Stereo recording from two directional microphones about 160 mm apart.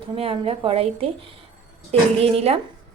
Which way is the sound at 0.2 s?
35° right (ahead or behind).